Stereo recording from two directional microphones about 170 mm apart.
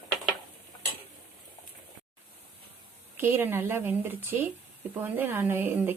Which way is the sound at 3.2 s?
10° right (ahead or behind).